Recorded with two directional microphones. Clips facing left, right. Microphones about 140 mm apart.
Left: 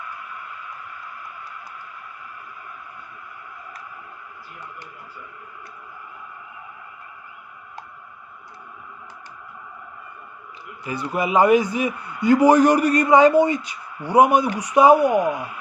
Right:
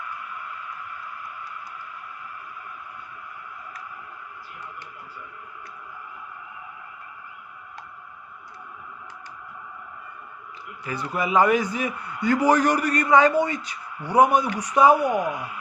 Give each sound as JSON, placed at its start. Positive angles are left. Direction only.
{"t": 10.8, "sound": "a man's voice", "side_deg": 20}